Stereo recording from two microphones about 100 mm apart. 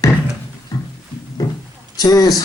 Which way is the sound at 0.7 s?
35° left (ahead or behind).